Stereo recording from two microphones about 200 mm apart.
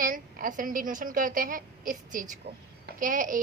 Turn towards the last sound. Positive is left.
turn(degrees=-40)  # may be behind; listen again after turning